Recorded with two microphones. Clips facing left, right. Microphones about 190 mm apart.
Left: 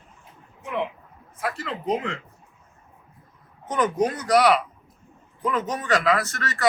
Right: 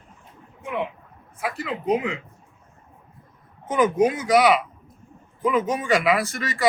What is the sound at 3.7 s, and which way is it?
Speech, 5° right (ahead or behind).